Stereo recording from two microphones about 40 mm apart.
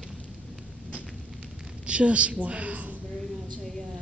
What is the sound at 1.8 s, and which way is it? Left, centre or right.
A woman's voice, right.